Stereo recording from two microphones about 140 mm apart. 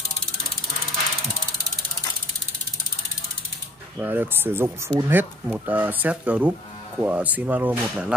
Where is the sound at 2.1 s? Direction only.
25° left (ahead or behind).